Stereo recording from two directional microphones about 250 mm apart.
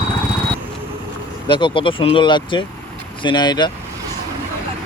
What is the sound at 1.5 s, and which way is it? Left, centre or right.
Speech, centre.